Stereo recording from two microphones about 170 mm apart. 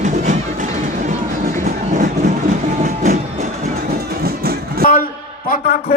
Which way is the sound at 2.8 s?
50° right (ahead or behind).